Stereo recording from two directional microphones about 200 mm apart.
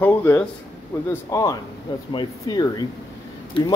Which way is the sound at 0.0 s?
10° left (ahead or behind).